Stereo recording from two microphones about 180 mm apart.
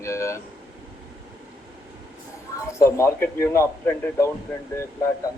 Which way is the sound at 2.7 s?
15° left (ahead or behind).